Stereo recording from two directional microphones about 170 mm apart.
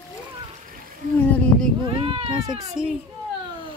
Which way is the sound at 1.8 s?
30° right (ahead or behind).